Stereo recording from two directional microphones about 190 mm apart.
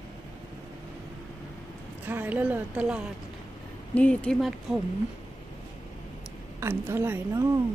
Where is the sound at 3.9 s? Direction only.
5° left (ahead or behind).